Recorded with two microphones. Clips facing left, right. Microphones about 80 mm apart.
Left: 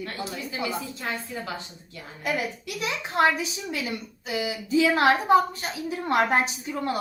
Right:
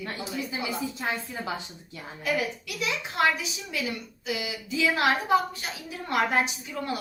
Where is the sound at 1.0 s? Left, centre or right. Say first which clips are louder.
Right 2 dB; centre.